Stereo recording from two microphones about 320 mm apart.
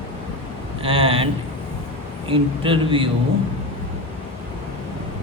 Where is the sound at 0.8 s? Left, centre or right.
Centre.